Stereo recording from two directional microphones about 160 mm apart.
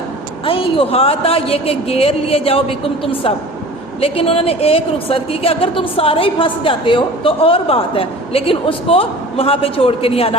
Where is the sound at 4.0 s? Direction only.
35° left (ahead or behind).